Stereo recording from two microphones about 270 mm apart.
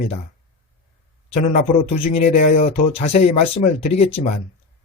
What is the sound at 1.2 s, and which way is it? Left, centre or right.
A man's voice, left.